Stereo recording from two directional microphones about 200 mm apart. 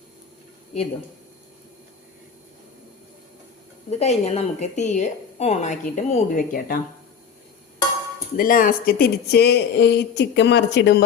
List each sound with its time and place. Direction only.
3.8 s a woman's voice: 35° left (ahead or behind)
8.4 s speech: 45° left (ahead or behind)